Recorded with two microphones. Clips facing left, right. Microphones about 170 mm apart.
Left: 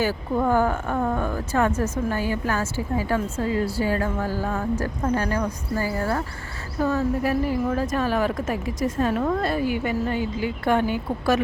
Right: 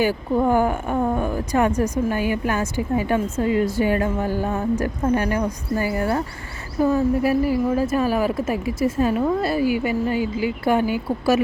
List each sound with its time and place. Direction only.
0.0 s speech: 15° right (ahead or behind)